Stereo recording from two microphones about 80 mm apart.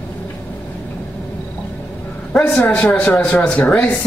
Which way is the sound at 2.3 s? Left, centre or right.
Centre.